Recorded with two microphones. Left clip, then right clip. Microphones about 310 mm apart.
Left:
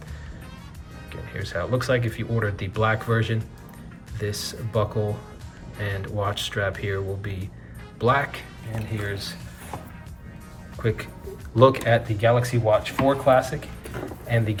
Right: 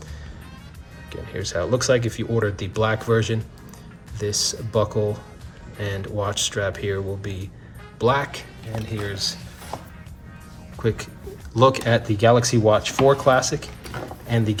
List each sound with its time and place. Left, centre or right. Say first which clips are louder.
1.1 s speech: right 4 dB; centre
9.7 s music: right 3 dB; right
10.8 s speech: right 2 dB; centre